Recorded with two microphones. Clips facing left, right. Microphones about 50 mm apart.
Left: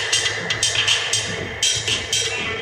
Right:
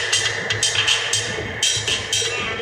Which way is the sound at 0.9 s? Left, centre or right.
Right.